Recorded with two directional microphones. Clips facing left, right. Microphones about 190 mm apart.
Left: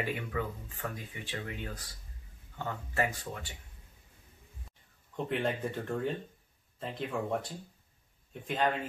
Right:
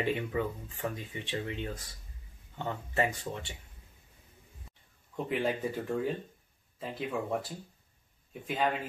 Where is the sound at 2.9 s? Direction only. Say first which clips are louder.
Right 2 dB; 25° right (ahead or behind).